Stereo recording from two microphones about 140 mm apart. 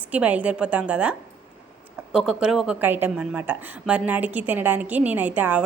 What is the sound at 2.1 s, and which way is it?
A woman's voice, 5° right (ahead or behind).